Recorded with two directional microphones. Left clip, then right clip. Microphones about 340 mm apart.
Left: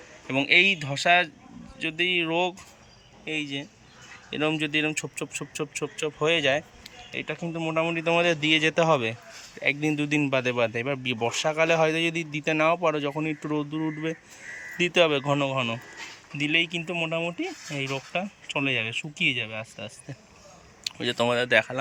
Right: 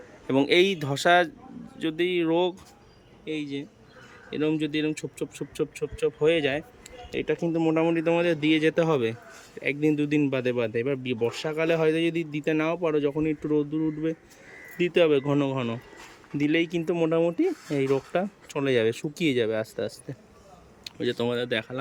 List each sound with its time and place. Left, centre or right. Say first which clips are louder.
0.3 s speech: left 1 dB; centre